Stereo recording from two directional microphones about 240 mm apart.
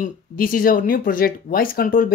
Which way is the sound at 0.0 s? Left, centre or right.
Left.